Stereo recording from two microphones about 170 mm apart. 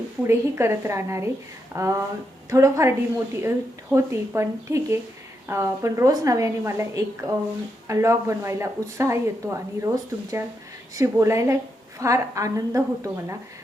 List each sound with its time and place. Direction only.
0.3 s a woman's voice: 15° right (ahead or behind)